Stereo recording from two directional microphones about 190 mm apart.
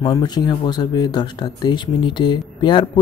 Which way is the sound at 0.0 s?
20° left (ahead or behind).